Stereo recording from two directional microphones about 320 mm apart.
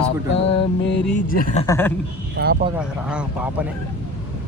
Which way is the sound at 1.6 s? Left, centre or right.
Centre.